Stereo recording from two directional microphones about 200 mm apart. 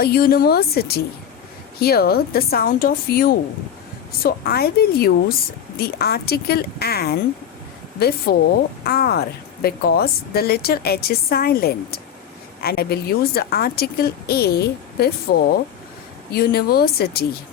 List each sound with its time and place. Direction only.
0.0 s a woman's voice: 50° left (ahead or behind)
16.3 s a woman's voice: 50° left (ahead or behind)